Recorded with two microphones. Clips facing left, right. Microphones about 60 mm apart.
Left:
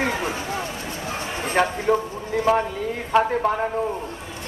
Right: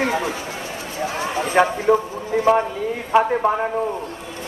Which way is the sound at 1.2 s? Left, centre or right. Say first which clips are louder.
Right 6 dB; right.